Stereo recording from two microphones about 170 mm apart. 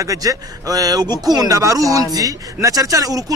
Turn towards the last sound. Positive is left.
turn(degrees=-20)  # may be behind; listen again after turning